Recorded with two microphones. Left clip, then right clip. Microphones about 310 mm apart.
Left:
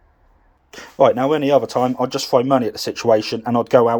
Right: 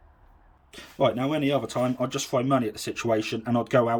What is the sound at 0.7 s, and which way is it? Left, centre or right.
Speech, centre.